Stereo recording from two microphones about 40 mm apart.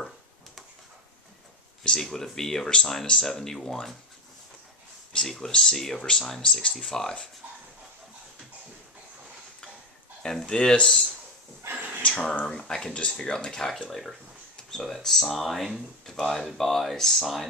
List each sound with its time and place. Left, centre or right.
1.8 s speech: centre
5.2 s speech: centre
10.2 s speech: left
11.7 s a sound: right
12.1 s speech: centre
14.6 s a sound: centre
15.0 s speech: centre